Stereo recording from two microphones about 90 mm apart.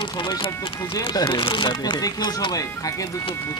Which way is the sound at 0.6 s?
40° left (ahead or behind).